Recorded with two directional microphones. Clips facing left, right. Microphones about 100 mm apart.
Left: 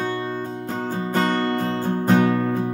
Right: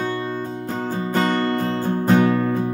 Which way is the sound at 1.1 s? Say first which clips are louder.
Right 1 dB; 25° left (ahead or behind).